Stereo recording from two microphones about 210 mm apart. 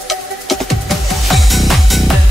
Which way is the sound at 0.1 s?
Centre (ahead or behind).